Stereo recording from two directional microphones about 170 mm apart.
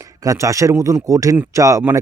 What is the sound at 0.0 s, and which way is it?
A man's voice, 20° right (ahead or behind).